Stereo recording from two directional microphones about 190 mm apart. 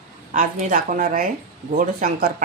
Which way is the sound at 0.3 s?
45° right (ahead or behind).